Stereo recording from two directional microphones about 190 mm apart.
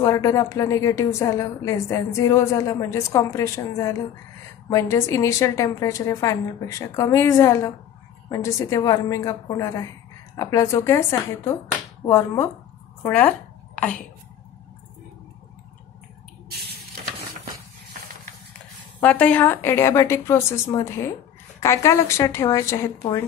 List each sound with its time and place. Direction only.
0.0 s a woman's voice: 15° left (ahead or behind)
19.0 s a woman's voice: 10° left (ahead or behind)